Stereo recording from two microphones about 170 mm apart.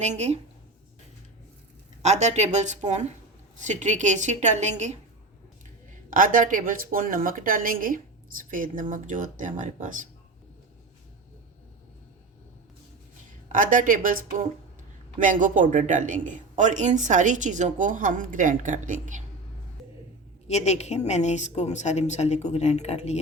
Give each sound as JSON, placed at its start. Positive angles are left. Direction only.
{"t": 0.0, "sound": "speech", "side_deg": -40}
{"t": 2.0, "sound": "speech", "side_deg": -40}
{"t": 6.1, "sound": "speech", "side_deg": -55}
{"t": 13.5, "sound": "speech", "side_deg": -50}
{"t": 20.5, "sound": "a woman's voice", "side_deg": 40}